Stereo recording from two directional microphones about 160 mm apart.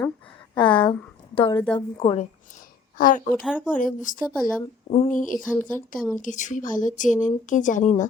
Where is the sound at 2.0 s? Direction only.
30° left (ahead or behind).